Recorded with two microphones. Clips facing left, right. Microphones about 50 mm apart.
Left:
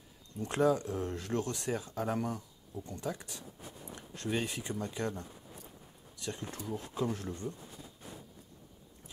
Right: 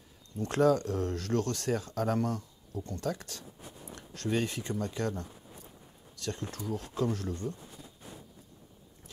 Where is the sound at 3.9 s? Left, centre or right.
Centre.